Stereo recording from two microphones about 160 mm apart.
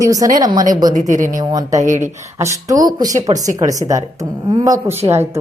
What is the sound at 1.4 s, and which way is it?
Speech, 25° right (ahead or behind).